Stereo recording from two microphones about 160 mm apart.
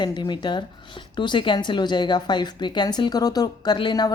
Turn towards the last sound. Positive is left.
turn(degrees=25)  # may be behind; listen again after turning